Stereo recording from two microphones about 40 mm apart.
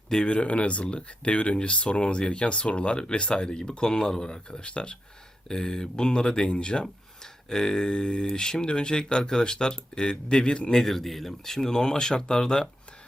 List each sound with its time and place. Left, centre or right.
0.3 s speech: left
5.5 s speech: centre
10.8 s speech: centre